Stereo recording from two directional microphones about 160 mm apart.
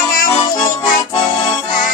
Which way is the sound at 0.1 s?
60° left (ahead or behind).